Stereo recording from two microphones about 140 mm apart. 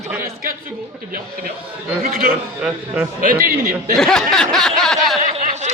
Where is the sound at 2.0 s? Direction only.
90° right.